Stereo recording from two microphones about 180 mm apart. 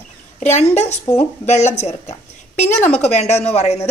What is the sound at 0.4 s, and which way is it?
A woman's voice, 40° left (ahead or behind).